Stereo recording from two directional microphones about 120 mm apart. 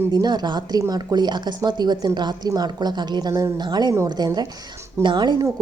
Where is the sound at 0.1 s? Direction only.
35° right (ahead or behind).